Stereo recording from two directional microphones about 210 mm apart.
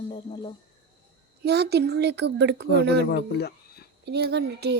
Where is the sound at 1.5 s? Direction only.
50° right (ahead or behind).